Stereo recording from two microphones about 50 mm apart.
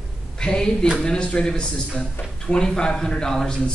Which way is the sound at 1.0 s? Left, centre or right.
Centre.